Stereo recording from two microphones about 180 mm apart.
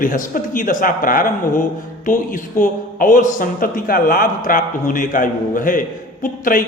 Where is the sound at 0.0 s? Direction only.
50° left (ahead or behind).